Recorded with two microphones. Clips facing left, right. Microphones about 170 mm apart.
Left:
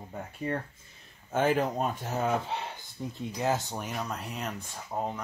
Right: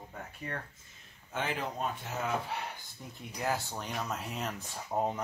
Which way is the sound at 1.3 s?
45° left (ahead or behind).